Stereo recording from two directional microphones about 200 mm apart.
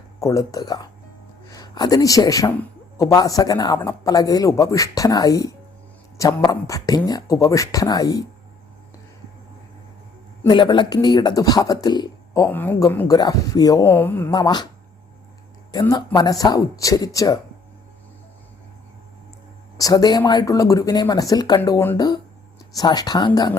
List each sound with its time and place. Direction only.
0.2 s speech: 15° left (ahead or behind)
10.5 s speech: 25° left (ahead or behind)
15.7 s speech: 20° left (ahead or behind)
19.7 s speech: 20° left (ahead or behind)